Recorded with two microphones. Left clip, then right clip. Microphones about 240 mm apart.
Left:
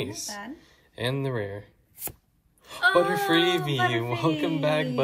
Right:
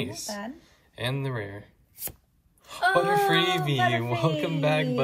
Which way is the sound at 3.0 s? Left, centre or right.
Centre.